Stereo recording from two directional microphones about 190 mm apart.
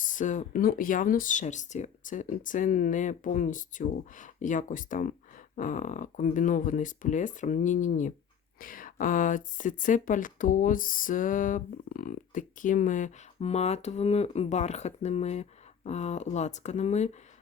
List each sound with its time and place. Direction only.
0.0 s speech: 45° left (ahead or behind)